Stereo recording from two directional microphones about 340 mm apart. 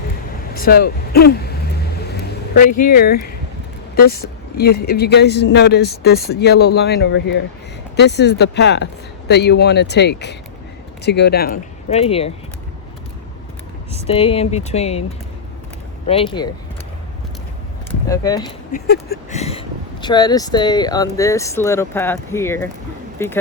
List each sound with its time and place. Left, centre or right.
0.5 s a woman's voice: left
2.0 s a sound: left
2.7 s a woman's voice: left
11.9 s speech: centre
14.1 s speech: centre
16.0 s speech: centre
18.1 s speech: centre
18.7 s speech: left; by 23.4 s centre